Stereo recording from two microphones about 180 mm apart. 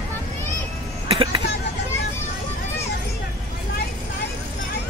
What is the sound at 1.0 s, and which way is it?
Vehicle, 30° right (ahead or behind).